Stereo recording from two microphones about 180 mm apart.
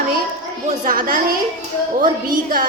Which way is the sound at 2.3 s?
50° right (ahead or behind).